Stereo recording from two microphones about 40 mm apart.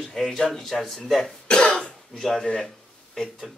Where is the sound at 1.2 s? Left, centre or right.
Centre.